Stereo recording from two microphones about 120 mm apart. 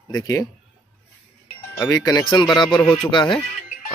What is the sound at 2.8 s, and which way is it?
Speech, 15° left (ahead or behind).